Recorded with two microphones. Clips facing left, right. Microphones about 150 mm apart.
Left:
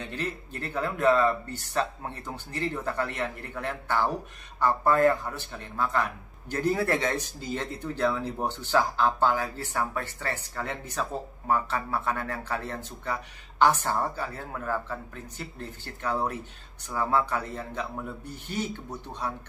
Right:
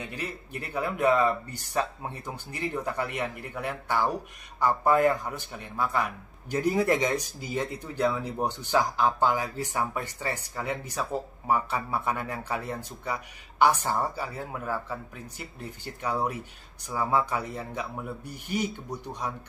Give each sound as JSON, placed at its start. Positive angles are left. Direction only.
{"t": 0.0, "sound": "a man's voice", "side_deg": -10}